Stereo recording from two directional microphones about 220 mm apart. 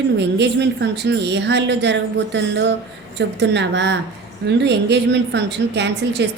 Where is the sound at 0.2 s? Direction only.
50° right (ahead or behind).